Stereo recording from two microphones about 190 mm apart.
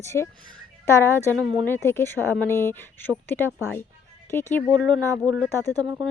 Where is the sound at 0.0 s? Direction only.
15° left (ahead or behind).